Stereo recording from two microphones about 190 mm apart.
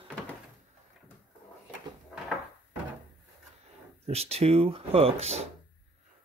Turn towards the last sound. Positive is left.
turn(degrees=-35)  # may be behind; listen again after turning